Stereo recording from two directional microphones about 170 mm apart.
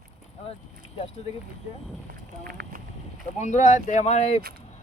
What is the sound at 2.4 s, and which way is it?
Speech, 60° right (ahead or behind).